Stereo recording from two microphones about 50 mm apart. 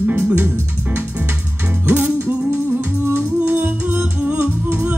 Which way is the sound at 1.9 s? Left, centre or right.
Right.